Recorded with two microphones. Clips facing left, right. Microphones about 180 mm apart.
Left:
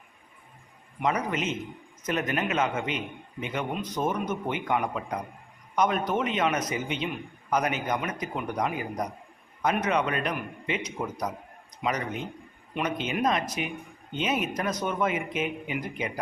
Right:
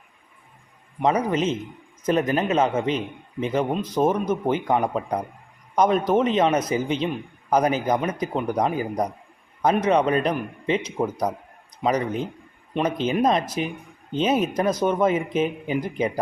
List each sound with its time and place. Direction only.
0.9 s speech: 30° right (ahead or behind)